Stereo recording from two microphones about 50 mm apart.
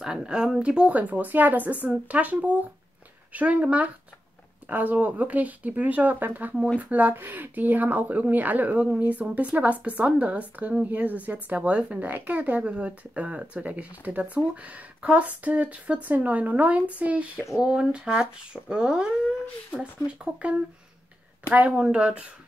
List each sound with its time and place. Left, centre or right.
0.0 s speech: centre
10.9 s speech: right; by 19.0 s centre
20.4 s speech: right